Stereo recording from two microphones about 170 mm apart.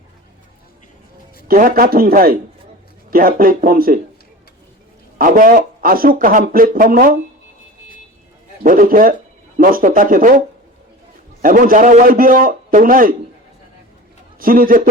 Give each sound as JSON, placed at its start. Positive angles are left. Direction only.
{"t": 1.5, "sound": "speech", "side_deg": -55}
{"t": 5.1, "sound": "speech", "side_deg": -55}
{"t": 8.6, "sound": "speech", "side_deg": -55}
{"t": 11.4, "sound": "speech", "side_deg": -55}
{"t": 14.3, "sound": "speech", "side_deg": -55}